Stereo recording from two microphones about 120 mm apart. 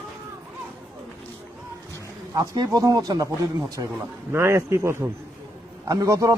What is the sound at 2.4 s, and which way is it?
A man's voice, 30° right (ahead or behind).